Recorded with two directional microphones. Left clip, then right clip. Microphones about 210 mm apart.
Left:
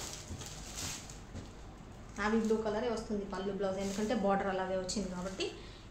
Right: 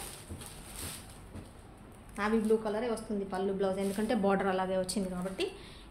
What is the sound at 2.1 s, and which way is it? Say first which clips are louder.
A woman's voice: right 3 dB; 40° right (ahead or behind).